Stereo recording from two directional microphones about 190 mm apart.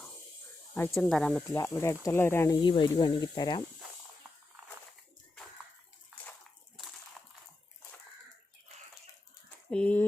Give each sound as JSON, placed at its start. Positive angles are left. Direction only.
{"t": 0.9, "sound": "speech", "side_deg": 5}
{"t": 2.6, "sound": "speech", "side_deg": 25}
{"t": 7.2, "sound": "crushing", "side_deg": 0}
{"t": 9.6, "sound": "a sound", "side_deg": 5}